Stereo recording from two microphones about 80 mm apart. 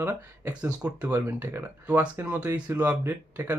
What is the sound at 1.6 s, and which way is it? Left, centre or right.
Speech, centre.